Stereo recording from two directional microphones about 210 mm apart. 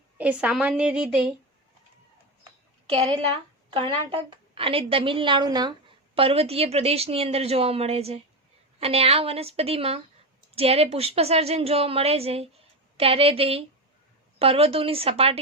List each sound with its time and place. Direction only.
0.2 s a woman's voice: 5° right (ahead or behind)
2.9 s a woman's voice: 25° right (ahead or behind)